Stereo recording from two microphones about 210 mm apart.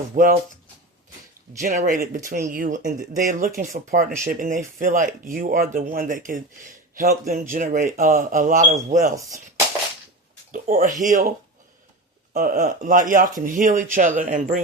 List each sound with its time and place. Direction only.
0.1 s speech: 40° right (ahead or behind)
1.6 s speech: 40° right (ahead or behind)
10.5 s speech: 40° right (ahead or behind)
12.3 s speech: 40° right (ahead or behind)